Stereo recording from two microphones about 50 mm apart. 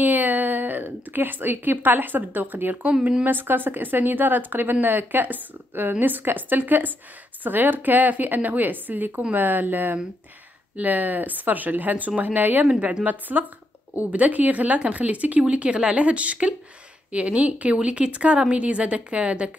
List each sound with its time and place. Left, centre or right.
0.0 s a woman's voice: right
2.9 s speech: centre
3.3 s speech: right